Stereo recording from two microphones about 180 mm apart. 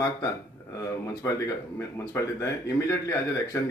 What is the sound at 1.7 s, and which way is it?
Speech, 15° left (ahead or behind).